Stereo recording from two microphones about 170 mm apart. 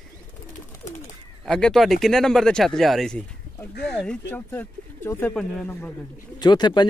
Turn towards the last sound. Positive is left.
turn(degrees=25)  # may be behind; listen again after turning